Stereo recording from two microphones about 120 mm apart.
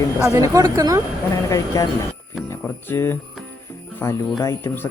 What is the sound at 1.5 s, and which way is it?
Speech, 30° left (ahead or behind).